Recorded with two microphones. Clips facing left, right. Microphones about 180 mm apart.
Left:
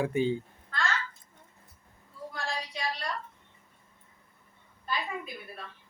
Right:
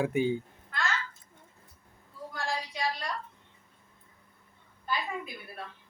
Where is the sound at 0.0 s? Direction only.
10° right (ahead or behind).